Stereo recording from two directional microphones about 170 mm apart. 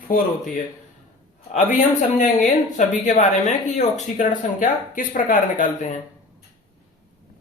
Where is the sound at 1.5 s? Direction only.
45° left (ahead or behind).